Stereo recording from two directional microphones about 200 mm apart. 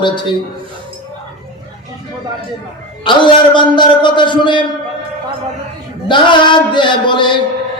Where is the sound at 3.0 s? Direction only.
25° left (ahead or behind).